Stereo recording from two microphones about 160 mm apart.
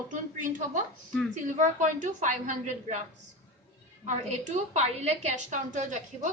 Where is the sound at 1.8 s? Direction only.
50° right (ahead or behind).